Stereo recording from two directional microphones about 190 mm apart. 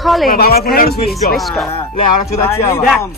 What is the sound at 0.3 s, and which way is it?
Speech, 55° left (ahead or behind).